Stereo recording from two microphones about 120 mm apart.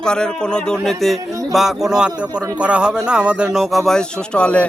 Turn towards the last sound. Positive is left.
turn(degrees=10)  # may be behind; listen again after turning